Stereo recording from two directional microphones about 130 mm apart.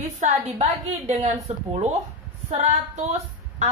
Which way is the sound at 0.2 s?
55° right (ahead or behind).